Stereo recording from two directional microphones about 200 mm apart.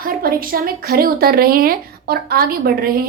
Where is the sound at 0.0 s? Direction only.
45° right (ahead or behind).